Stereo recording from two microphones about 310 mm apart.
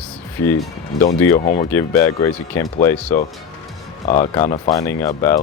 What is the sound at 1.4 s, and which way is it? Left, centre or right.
Speech, left.